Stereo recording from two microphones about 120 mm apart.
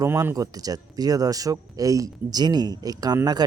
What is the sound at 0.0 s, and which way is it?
Speech, 25° right (ahead or behind).